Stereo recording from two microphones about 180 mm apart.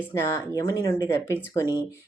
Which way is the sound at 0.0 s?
15° left (ahead or behind).